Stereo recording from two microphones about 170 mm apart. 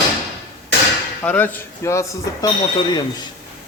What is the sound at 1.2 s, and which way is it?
Speech, 10° left (ahead or behind).